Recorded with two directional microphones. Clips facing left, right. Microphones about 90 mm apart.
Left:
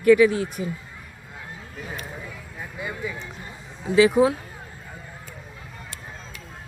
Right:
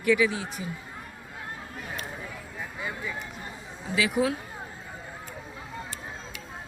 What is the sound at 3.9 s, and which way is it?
Speech, 30° left (ahead or behind).